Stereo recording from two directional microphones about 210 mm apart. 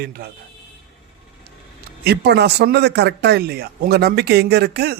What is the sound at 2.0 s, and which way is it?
Speech, 50° right (ahead or behind).